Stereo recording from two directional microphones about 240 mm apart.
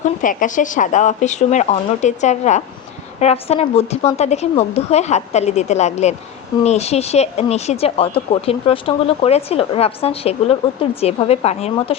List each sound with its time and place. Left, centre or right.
0.0 s speech: left